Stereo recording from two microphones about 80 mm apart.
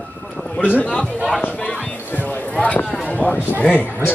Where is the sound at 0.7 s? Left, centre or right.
Centre.